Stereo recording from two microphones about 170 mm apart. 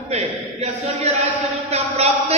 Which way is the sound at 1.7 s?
40° right (ahead or behind).